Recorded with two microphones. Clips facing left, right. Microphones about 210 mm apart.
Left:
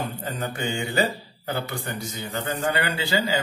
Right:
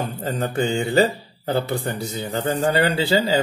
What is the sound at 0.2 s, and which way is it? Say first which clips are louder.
A man's voice: right 7 dB; 35° right (ahead or behind).